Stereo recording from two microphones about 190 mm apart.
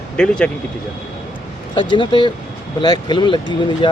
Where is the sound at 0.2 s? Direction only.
5° left (ahead or behind).